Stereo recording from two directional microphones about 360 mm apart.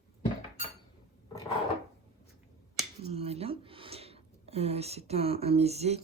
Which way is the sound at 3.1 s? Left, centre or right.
Centre.